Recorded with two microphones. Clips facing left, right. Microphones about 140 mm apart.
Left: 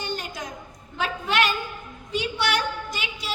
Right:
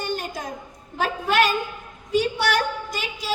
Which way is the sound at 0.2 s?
45° right (ahead or behind).